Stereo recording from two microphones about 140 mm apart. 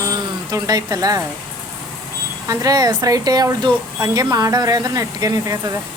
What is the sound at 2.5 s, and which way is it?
Speech, 25° right (ahead or behind).